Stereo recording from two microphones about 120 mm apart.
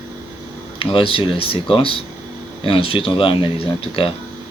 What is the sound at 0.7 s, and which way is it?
Speech, 50° left (ahead or behind).